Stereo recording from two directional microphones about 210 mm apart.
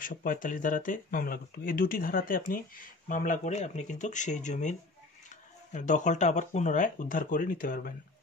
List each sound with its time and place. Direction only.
0.0 s speech: 40° left (ahead or behind)